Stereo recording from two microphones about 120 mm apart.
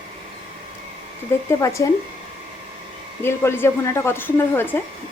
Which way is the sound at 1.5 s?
25° left (ahead or behind).